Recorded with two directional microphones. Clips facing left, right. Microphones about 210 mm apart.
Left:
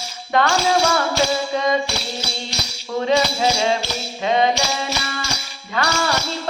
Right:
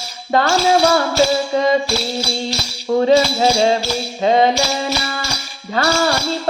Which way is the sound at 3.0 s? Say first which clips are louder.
Right 5 dB; 35° right (ahead or behind).